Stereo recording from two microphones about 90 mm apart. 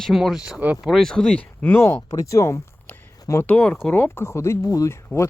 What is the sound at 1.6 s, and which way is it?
Speech, 25° left (ahead or behind).